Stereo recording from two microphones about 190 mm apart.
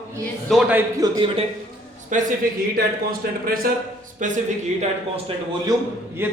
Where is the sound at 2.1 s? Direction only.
40° right (ahead or behind).